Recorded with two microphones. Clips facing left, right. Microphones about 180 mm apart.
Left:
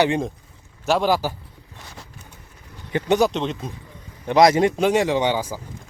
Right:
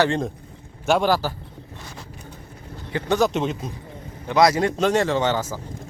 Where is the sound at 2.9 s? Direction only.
20° left (ahead or behind).